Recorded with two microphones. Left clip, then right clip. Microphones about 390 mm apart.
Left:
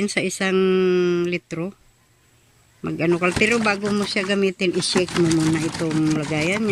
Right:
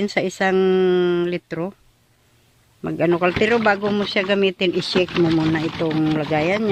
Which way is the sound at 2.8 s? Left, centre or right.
Centre.